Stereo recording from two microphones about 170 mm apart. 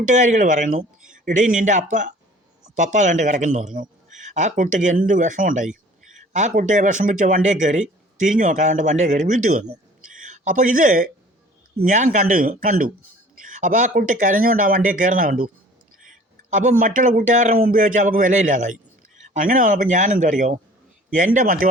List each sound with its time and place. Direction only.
0.1 s a man's voice: 45° right (ahead or behind)
16.5 s a man's voice: 45° right (ahead or behind)